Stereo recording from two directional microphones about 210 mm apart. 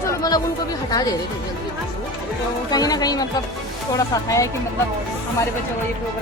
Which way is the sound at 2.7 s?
20° left (ahead or behind).